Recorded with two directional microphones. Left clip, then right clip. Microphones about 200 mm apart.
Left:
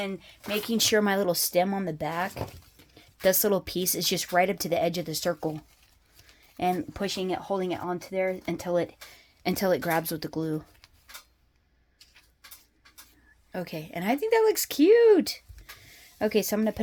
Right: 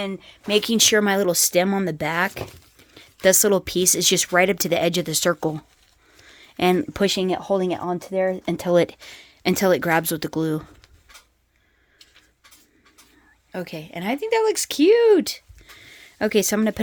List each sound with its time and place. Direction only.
0.0 s speech: 45° right (ahead or behind)
0.8 s speech: 30° right (ahead or behind); by 9.0 s 55° right (ahead or behind)
9.0 s speech: 35° right (ahead or behind)
13.5 s speech: 20° right (ahead or behind)